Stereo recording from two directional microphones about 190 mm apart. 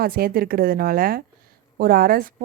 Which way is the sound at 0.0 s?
50° right (ahead or behind).